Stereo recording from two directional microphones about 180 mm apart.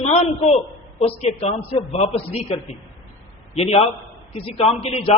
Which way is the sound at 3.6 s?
35° left (ahead or behind).